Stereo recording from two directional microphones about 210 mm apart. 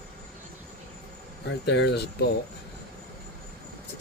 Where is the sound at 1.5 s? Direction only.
55° left (ahead or behind).